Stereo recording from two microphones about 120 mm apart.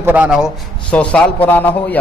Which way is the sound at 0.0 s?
10° right (ahead or behind).